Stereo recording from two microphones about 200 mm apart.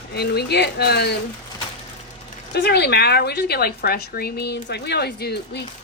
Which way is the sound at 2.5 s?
55° left (ahead or behind).